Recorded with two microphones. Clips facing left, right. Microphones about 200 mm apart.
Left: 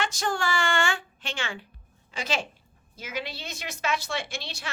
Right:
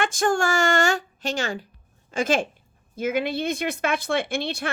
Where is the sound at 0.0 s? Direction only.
50° right (ahead or behind).